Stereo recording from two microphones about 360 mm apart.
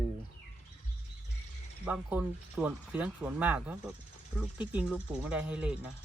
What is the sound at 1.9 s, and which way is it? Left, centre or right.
Speech, centre.